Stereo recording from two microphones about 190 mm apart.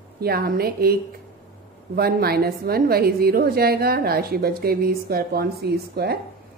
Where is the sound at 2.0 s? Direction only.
55° right (ahead or behind).